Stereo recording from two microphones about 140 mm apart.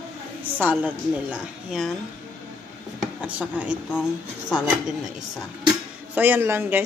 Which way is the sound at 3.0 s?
10° right (ahead or behind).